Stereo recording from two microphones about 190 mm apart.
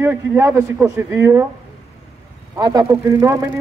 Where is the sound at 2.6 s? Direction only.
20° right (ahead or behind).